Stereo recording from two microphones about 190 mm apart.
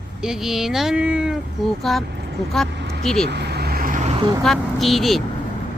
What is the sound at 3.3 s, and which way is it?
Vehicle, 60° right (ahead or behind).